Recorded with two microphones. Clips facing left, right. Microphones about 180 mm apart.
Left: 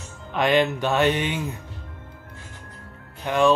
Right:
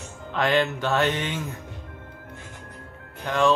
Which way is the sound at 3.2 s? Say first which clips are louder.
Left 2 dB; 15° left (ahead or behind).